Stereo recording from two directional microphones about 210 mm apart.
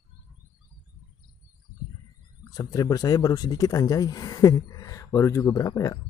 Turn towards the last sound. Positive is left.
turn(degrees=15)  # may be behind; listen again after turning